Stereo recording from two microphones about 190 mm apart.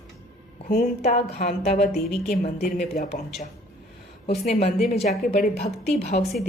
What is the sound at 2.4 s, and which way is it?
Speech, 45° left (ahead or behind).